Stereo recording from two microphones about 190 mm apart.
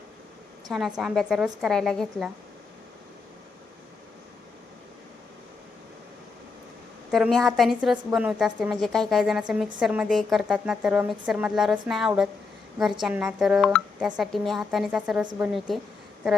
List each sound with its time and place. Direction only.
0.7 s a woman's voice: centre (ahead or behind)
7.1 s a woman's voice: centre (ahead or behind)